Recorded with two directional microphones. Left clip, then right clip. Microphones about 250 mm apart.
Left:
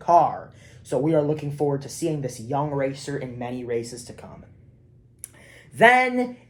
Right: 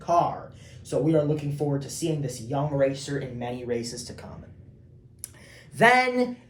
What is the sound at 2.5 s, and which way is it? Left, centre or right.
Speech, left.